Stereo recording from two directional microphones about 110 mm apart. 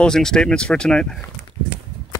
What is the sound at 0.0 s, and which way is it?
Speech, 5° left (ahead or behind).